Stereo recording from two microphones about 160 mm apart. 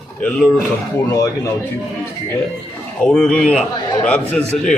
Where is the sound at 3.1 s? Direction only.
5° left (ahead or behind).